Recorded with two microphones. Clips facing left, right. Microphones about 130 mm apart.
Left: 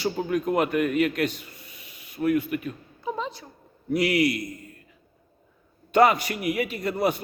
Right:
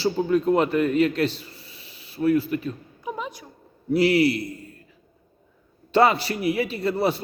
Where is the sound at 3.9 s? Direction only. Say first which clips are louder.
Right 4 dB; 30° right (ahead or behind).